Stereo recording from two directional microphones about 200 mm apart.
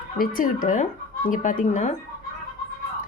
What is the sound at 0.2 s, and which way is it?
Speech, 45° left (ahead or behind).